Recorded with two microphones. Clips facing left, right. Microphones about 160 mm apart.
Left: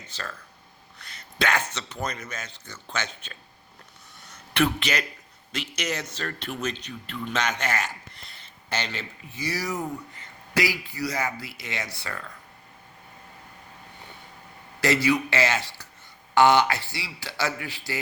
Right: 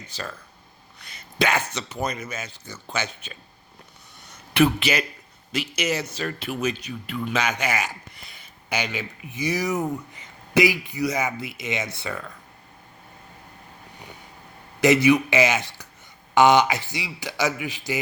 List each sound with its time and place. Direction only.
0.1 s speech: 10° right (ahead or behind)
4.5 s speech: 10° right (ahead or behind)
14.8 s speech: 20° right (ahead or behind)